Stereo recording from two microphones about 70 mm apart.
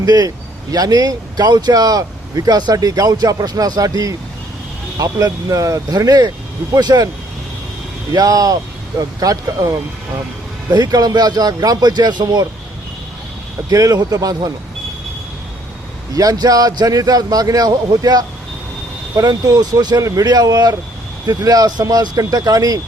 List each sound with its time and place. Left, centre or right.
0.0 s speech: right
5.9 s speech: right
8.1 s speech: right
10.7 s speech: right
13.7 s speech: right
16.1 s speech: right
20.0 s speech: right
20.2 s speech: right